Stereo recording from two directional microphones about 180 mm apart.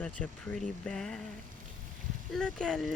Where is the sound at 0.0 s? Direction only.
5° left (ahead or behind).